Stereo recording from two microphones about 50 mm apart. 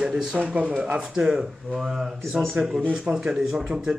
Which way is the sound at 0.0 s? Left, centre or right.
Centre.